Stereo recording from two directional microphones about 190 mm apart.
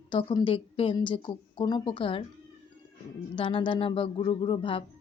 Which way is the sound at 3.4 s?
25° left (ahead or behind).